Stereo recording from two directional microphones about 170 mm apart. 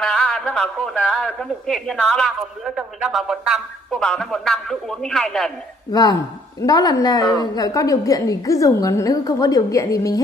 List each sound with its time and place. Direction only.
0.0 s a man's voice: 5° left (ahead or behind)
5.9 s a woman's voice: 20° left (ahead or behind)